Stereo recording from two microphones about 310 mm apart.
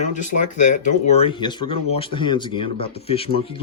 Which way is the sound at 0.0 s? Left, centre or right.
Left.